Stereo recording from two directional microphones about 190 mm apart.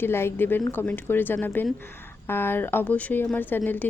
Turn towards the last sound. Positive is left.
turn(degrees=10)  # may be behind; listen again after turning